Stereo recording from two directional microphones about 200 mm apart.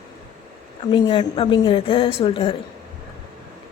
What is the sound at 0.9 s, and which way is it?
A woman's voice, 25° left (ahead or behind).